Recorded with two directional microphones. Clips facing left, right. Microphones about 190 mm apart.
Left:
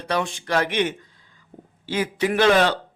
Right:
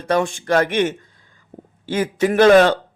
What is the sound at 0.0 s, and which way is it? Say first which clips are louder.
A man's voice: right 6 dB; 45° right (ahead or behind).